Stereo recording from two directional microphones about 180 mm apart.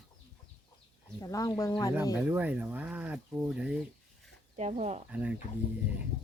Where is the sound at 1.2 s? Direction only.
20° left (ahead or behind).